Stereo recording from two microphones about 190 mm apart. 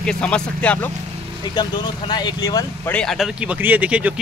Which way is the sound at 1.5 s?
20° left (ahead or behind).